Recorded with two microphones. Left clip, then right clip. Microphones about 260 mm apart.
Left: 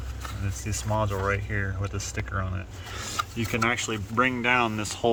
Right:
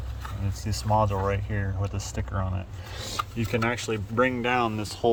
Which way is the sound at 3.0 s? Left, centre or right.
Centre.